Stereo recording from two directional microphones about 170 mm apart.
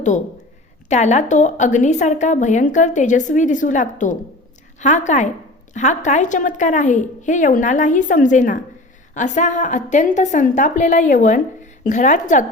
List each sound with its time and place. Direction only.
0.9 s a woman's voice: 45° left (ahead or behind)